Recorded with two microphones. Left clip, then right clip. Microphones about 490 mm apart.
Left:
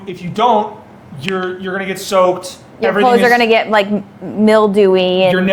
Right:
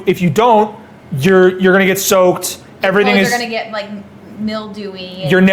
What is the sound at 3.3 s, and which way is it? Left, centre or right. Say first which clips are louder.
Speech: left 7 dB; left.